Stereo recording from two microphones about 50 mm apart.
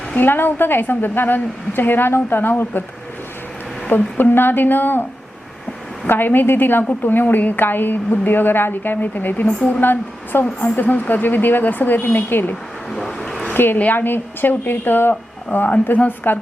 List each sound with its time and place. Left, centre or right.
0.2 s a woman's voice: left
3.8 s a woman's voice: left
6.1 s a woman's voice: left
9.6 s a woman's voice: centre
9.8 s a woman's voice: left
12.9 s vehicle: centre
13.5 s a woman's voice: left